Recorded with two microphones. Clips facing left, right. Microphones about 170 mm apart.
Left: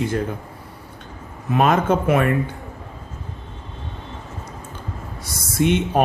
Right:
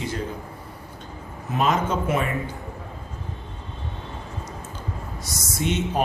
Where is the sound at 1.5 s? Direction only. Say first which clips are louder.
Left 5 dB; 60° left (ahead or behind).